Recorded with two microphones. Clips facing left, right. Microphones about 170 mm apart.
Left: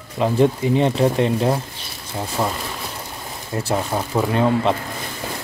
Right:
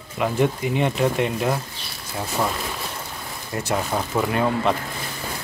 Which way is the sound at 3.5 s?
30° left (ahead or behind).